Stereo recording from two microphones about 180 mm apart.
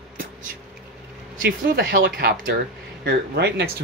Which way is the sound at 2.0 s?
60° right (ahead or behind).